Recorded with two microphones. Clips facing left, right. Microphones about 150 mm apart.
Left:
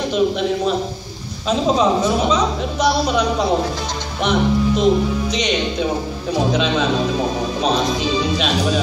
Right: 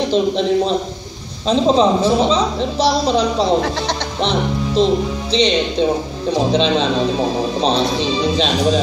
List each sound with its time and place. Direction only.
0.1 s a man's voice: 30° right (ahead or behind)
4.2 s music: 30° right (ahead or behind)
5.3 s a man's voice: 30° right (ahead or behind)